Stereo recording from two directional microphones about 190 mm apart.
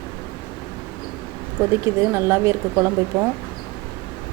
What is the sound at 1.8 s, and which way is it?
A woman's voice, 15° right (ahead or behind).